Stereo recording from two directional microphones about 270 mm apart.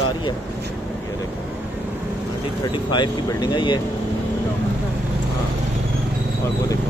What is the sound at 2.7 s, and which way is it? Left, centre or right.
Speech, centre.